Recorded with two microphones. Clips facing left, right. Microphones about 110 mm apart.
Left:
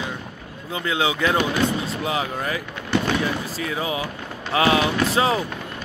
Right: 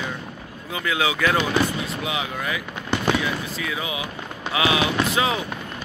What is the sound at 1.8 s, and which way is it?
Speech, 35° left (ahead or behind).